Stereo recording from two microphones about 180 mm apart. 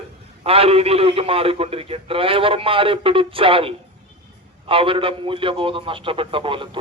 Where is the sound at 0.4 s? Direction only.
30° right (ahead or behind).